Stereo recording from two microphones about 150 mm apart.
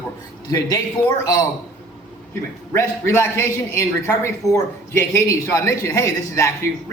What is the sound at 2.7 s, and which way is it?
A man's voice, 15° left (ahead or behind).